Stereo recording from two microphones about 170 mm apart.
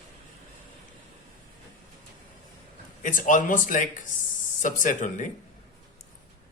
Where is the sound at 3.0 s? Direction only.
50° left (ahead or behind).